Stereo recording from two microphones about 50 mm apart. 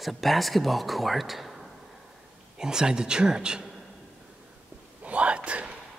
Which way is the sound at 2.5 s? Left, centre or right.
Centre.